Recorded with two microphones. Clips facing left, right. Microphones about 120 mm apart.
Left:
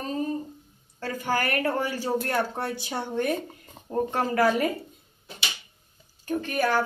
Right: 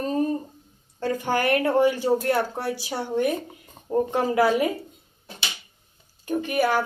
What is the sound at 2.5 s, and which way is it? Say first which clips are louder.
Speech: right 2 dB; 5° right (ahead or behind).